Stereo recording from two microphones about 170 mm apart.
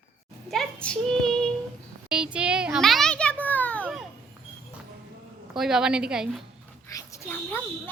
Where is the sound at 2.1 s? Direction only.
5° right (ahead or behind).